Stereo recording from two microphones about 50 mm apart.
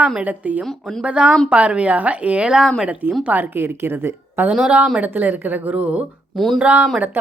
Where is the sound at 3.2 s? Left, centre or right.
Right.